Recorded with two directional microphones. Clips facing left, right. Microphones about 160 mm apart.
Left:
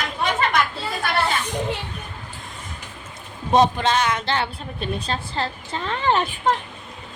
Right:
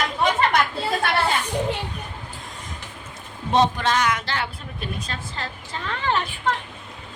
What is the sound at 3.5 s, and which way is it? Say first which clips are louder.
A woman's voice: left 2 dB; 15° left (ahead or behind).